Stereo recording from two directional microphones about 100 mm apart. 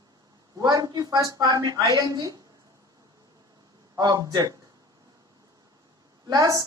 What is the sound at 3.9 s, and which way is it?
Speech, 40° right (ahead or behind).